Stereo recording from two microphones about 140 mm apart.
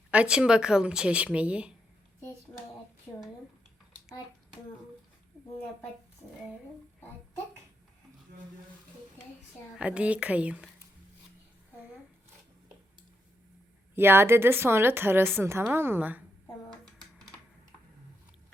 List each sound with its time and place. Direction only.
0.1 s a woman's voice: 5° right (ahead or behind)
9.7 s a woman's voice: 10° right (ahead or behind)
13.9 s a woman's voice: 15° right (ahead or behind)